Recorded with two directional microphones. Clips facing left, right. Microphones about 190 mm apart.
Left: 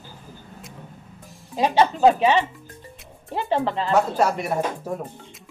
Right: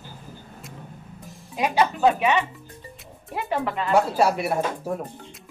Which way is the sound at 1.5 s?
30° left (ahead or behind).